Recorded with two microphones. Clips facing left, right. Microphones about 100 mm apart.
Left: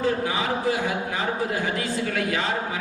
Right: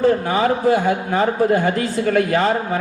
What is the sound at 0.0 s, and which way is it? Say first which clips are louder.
Speech: right 8 dB; 50° right (ahead or behind).